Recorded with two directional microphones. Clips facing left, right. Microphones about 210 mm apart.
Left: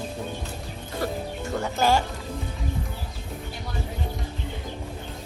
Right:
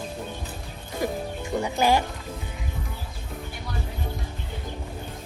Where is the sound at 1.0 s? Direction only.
15° right (ahead or behind).